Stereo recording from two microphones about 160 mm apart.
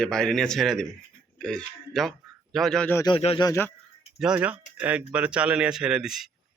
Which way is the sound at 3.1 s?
35° left (ahead or behind).